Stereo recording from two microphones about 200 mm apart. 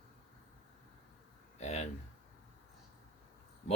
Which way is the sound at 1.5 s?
35° left (ahead or behind).